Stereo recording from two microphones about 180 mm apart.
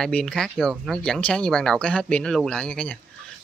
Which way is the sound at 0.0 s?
5° left (ahead or behind).